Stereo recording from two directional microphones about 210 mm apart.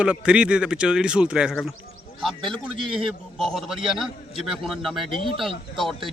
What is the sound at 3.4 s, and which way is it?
Speech, centre (ahead or behind).